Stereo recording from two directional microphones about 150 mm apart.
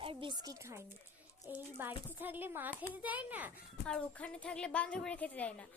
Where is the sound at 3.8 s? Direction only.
5° left (ahead or behind).